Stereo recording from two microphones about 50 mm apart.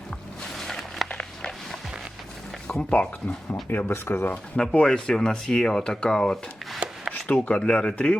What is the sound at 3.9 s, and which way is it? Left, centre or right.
Speech, left.